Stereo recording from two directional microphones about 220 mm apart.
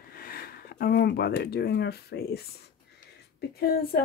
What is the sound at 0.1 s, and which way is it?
Speech, 40° left (ahead or behind).